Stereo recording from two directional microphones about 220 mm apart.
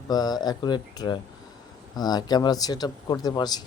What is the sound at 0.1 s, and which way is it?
Speech, 20° left (ahead or behind).